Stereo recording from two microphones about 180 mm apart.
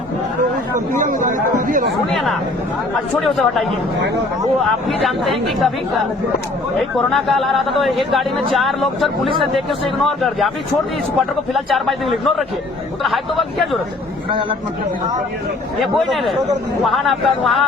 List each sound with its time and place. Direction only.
0.9 s speech: 45° right (ahead or behind)
3.2 s speech: centre (ahead or behind)
4.9 s speech: centre (ahead or behind)
6.7 s speech: centre (ahead or behind)
11.5 s speech: centre (ahead or behind)
15.8 s speech: centre (ahead or behind)